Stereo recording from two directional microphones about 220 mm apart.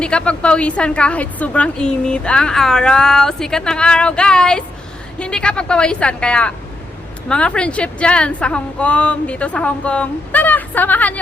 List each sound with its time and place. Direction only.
0.0 s a woman's voice: 5° left (ahead or behind)